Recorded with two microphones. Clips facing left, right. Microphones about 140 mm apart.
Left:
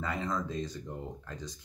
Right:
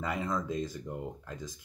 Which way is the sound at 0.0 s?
10° right (ahead or behind).